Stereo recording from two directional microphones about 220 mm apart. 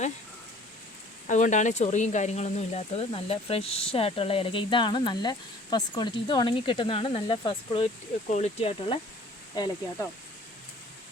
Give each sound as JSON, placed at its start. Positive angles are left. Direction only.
{"t": 1.3, "sound": "speech", "side_deg": 35}